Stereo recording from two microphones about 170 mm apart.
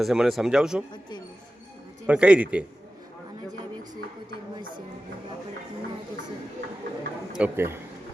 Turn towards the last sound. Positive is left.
turn(degrees=-15)  # may be behind; listen again after turning